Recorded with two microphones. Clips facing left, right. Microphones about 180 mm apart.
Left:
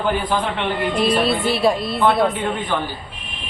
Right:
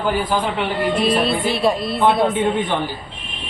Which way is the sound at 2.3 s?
20° right (ahead or behind).